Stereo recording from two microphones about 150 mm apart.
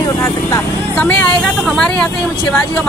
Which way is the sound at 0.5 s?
10° left (ahead or behind).